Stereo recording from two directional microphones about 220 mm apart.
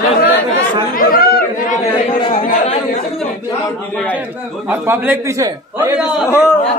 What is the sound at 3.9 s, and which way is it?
Speech, 5° left (ahead or behind).